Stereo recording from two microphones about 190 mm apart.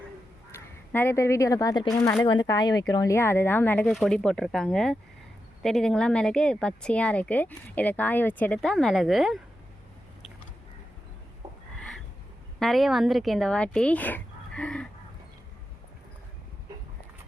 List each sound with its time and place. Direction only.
0.9 s speech: 10° left (ahead or behind)
3.8 s a woman's voice: centre (ahead or behind)
11.4 s a sound: 25° right (ahead or behind)
12.5 s speech: centre (ahead or behind)